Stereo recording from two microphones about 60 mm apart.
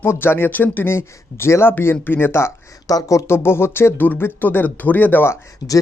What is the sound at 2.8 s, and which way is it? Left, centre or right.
Speech, left.